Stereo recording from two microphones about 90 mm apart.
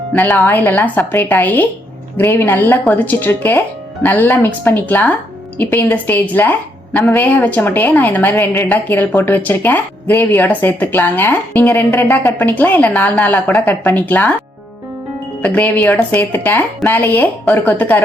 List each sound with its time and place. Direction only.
0.1 s a woman's voice: 20° left (ahead or behind)
15.4 s a woman's voice: 15° left (ahead or behind)